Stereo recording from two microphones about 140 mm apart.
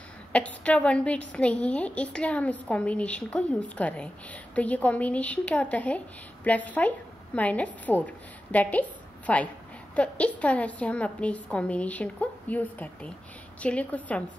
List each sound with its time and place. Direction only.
0.3 s a woman's voice: 10° left (ahead or behind)